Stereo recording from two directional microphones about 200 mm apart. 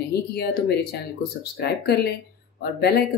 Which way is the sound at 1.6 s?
55° left (ahead or behind).